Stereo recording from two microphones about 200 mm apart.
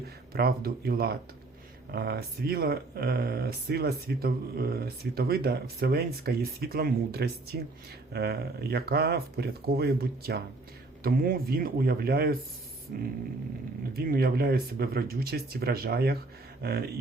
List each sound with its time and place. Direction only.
0.3 s speech: 50° right (ahead or behind)